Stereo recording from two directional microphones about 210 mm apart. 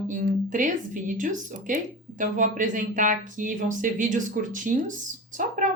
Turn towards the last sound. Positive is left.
turn(degrees=-40)  # may be behind; listen again after turning